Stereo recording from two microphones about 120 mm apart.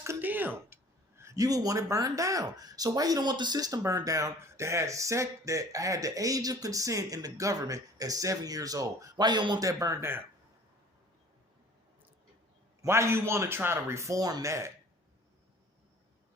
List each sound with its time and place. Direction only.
0.0 s speech: 20° right (ahead or behind)
12.8 s speech: 20° right (ahead or behind)